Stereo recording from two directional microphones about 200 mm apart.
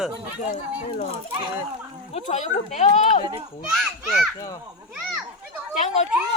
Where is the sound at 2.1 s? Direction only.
35° left (ahead or behind).